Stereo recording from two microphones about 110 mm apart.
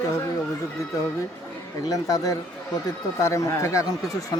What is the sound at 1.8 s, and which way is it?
Speech, 30° left (ahead or behind).